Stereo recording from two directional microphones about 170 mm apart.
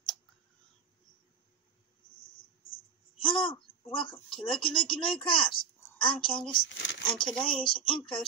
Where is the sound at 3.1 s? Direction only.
30° left (ahead or behind).